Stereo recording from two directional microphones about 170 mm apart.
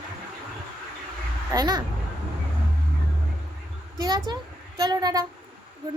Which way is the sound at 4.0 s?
25° right (ahead or behind).